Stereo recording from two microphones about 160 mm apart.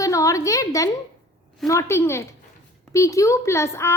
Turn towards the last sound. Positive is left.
turn(degrees=15)  # may be behind; listen again after turning